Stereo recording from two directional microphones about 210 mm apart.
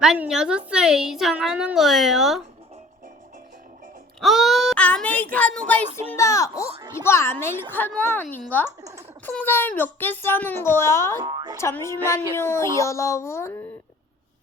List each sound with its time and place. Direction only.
0.0 s a woman's voice: 5° right (ahead or behind)
4.2 s a child's voice: centre (ahead or behind); by 6.7 s 15° left (ahead or behind)
6.7 s speech: 25° right (ahead or behind)
7.0 s a child's voice: 10° left (ahead or behind)
8.8 s a sound: 15° right (ahead or behind)
9.2 s a child's voice: 10° left (ahead or behind)
11.2 s speech: 20° right (ahead or behind)
11.6 s a child's voice: 15° left (ahead or behind)